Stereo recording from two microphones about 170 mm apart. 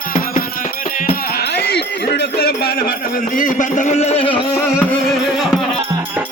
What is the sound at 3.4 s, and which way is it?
A man's voice, 50° left (ahead or behind).